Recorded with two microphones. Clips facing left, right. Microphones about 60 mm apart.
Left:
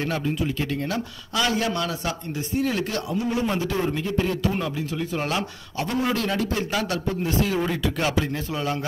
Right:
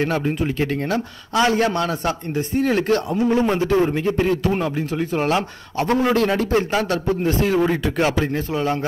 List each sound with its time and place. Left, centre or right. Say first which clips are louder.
0.0 s a man's voice: right 5 dB; right